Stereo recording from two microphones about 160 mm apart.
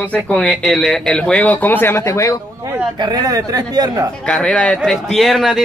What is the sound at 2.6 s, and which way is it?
Speech, 15° right (ahead or behind).